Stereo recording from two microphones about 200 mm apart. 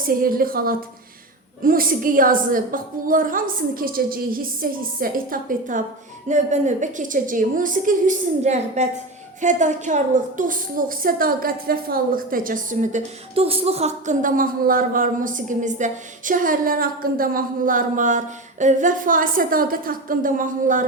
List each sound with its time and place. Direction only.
0.1 s a woman's voice: 45° right (ahead or behind)
13.3 s a woman's voice: 30° right (ahead or behind)